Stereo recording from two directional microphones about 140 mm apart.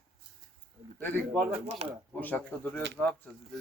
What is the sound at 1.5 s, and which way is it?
Speech, 50° right (ahead or behind).